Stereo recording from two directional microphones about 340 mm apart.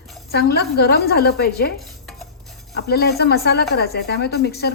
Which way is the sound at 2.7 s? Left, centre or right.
Left.